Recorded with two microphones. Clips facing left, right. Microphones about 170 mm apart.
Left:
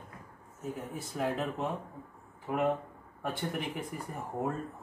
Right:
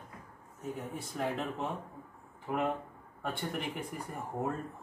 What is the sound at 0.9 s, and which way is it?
Speech, centre (ahead or behind).